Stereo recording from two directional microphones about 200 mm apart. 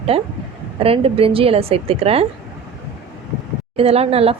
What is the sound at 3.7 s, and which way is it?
Speech, 30° right (ahead or behind).